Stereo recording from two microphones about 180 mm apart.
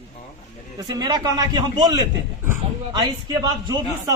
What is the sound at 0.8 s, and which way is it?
Speech, 25° right (ahead or behind).